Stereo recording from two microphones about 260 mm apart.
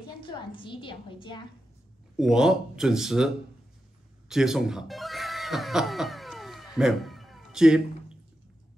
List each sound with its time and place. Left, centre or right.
0.0 s a woman's voice: centre
2.1 s speech: centre
4.3 s speech: centre